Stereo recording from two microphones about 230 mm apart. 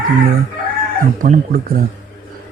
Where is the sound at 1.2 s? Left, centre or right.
Right.